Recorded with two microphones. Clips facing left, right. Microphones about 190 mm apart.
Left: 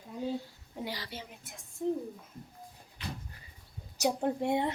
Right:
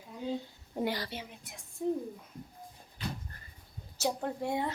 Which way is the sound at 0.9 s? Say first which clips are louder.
Right 6 dB; 50° right (ahead or behind).